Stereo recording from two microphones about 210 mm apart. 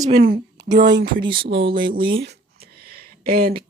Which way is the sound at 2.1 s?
60° right (ahead or behind).